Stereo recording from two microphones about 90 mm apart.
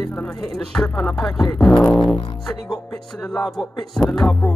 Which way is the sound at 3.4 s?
5° left (ahead or behind).